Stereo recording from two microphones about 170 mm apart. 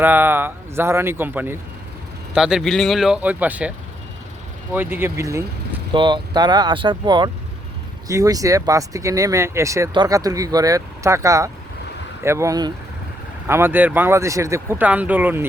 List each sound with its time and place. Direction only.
0.0 s speech: 10° right (ahead or behind)
4.7 s speech: 10° right (ahead or behind)
5.9 s speech: 25° right (ahead or behind); by 15.4 s 10° right (ahead or behind)